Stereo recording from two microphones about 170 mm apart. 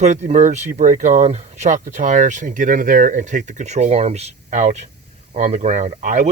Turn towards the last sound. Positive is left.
turn(degrees=-45)  # may be behind; listen again after turning